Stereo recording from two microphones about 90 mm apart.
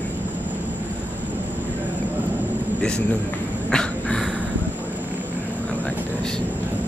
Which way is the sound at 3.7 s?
10° left (ahead or behind).